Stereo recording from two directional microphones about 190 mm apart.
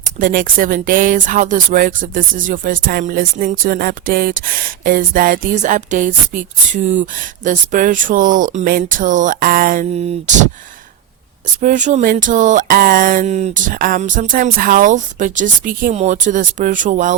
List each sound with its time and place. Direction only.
0.0 s speech: 45° right (ahead or behind)
11.6 s speech: 40° right (ahead or behind)